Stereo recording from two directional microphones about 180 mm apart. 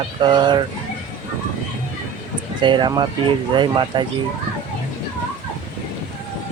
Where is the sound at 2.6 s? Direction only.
25° right (ahead or behind).